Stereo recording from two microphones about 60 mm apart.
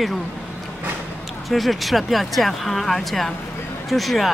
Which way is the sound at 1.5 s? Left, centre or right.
Centre.